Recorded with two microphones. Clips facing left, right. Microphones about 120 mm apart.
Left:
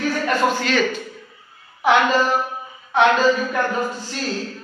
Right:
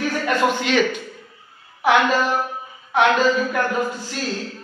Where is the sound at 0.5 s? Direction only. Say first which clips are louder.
Even; 15° right (ahead or behind).